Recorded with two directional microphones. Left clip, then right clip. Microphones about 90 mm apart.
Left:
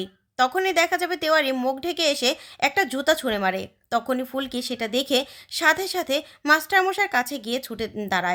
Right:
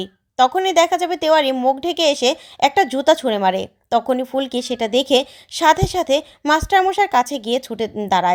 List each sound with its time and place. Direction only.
0.0 s a child's voice: 40° right (ahead or behind)
7.7 s a woman's voice: 35° right (ahead or behind)
8.0 s speech: 55° right (ahead or behind)